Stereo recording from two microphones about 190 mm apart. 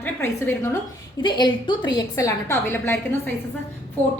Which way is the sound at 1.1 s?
25° left (ahead or behind).